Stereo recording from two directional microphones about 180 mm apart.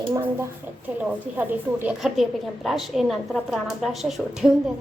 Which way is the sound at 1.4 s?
10° right (ahead or behind).